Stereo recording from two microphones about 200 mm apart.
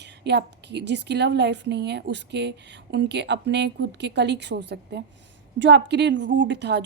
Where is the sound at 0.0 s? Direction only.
60° right (ahead or behind).